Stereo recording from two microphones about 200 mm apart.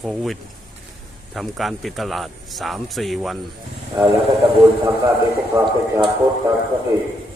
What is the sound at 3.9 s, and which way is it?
Speech, 15° right (ahead or behind).